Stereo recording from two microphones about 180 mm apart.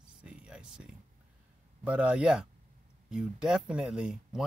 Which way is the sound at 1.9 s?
5° right (ahead or behind).